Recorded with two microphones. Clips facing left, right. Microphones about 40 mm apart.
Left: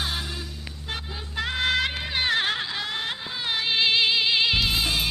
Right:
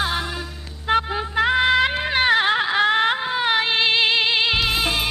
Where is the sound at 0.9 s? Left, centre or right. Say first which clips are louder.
Right 15 dB; right.